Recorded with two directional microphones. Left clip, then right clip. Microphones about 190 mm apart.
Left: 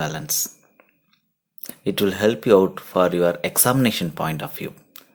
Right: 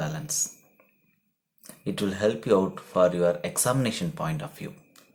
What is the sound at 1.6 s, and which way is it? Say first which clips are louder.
Speech: left 9 dB; 30° left (ahead or behind).